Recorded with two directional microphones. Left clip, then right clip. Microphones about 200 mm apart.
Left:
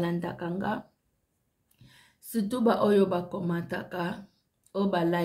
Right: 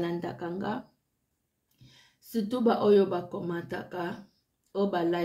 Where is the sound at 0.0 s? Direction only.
25° left (ahead or behind).